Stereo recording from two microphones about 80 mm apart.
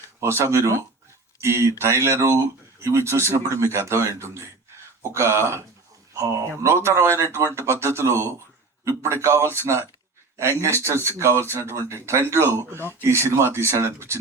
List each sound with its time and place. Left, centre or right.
0.2 s speech: right